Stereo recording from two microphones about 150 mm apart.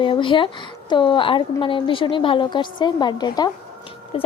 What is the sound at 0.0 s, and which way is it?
A woman's voice, 35° left (ahead or behind).